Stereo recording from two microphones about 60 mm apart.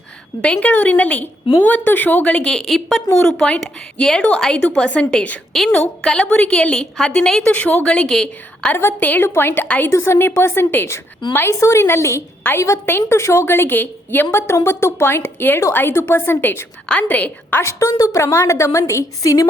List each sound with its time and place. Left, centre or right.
0.4 s speech: centre
0.7 s a woman's voice: left
2.6 s a woman's voice: centre
8.7 s a woman's voice: left
9.2 s a woman's voice: left
9.6 s a woman's voice: left
9.9 s a woman's voice: left
11.6 s a woman's voice: left
12.8 s a woman's voice: left
14.3 s a woman's voice: left
16.9 s a woman's voice: left
17.6 s a woman's voice: left
18.2 s a woman's voice: left